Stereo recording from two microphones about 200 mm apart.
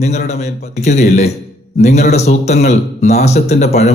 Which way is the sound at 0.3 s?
35° left (ahead or behind).